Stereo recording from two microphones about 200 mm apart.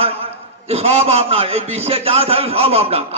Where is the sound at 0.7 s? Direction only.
30° right (ahead or behind).